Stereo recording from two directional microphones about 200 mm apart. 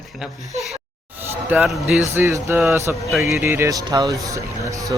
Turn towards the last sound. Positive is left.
turn(degrees=-15)  # may be behind; listen again after turning